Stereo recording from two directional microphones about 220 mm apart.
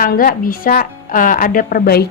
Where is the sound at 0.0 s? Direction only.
40° left (ahead or behind).